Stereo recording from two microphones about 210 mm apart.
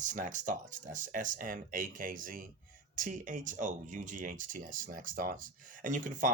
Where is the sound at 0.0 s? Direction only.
35° right (ahead or behind).